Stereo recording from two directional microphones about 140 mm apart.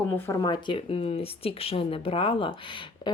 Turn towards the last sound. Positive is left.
turn(degrees=35)  # may be behind; listen again after turning